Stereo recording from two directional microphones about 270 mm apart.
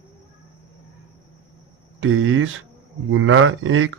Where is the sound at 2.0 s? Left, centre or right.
Right.